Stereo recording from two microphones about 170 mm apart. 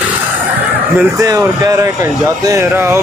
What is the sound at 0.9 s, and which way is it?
Speech, 20° right (ahead or behind).